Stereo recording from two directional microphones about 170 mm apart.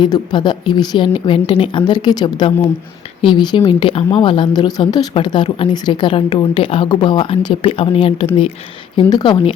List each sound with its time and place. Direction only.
0.0 s speech: 25° left (ahead or behind)